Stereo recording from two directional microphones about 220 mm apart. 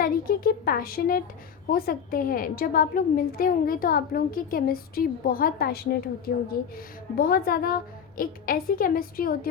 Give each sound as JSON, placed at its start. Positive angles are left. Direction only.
{"t": 0.0, "sound": "a woman's voice", "side_deg": 40}